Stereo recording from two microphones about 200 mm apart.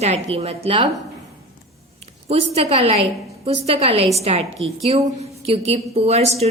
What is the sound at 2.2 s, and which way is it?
A woman's voice, 30° right (ahead or behind).